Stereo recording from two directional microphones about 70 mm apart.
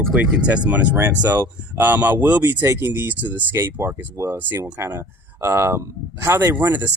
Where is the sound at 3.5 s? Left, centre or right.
Right.